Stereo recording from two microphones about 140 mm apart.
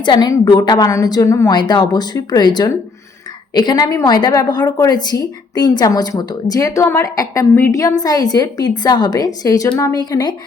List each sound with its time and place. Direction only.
0.0 s a woman's voice: 30° left (ahead or behind)